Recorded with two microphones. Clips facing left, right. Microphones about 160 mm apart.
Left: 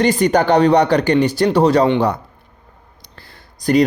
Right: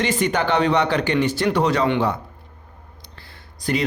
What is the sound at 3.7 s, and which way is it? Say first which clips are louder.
Speech: left 9 dB; 45° left (ahead or behind).